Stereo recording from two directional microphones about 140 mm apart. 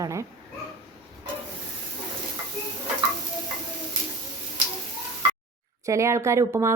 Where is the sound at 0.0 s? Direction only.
20° right (ahead or behind).